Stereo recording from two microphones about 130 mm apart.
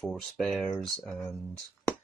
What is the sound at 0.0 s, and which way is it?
Speech, centre (ahead or behind).